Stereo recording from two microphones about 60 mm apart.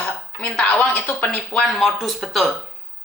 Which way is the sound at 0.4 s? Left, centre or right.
Centre.